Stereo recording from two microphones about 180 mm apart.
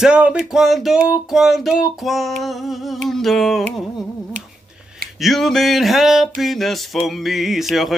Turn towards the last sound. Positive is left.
turn(degrees=0)  # may be behind; listen again after turning